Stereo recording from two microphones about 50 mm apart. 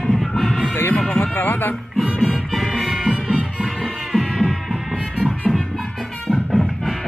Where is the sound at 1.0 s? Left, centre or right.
Centre.